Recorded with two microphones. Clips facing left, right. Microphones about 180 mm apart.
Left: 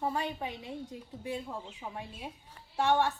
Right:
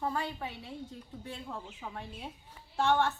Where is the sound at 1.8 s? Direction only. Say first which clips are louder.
Left 1 dB; 10° left (ahead or behind).